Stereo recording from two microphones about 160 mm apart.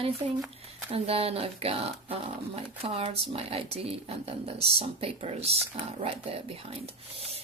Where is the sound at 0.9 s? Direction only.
40° right (ahead or behind).